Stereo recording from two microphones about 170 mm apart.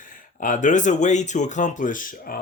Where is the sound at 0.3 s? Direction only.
50° left (ahead or behind).